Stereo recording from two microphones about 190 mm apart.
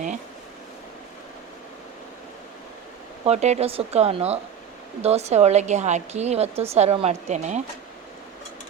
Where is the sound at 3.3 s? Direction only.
35° right (ahead or behind).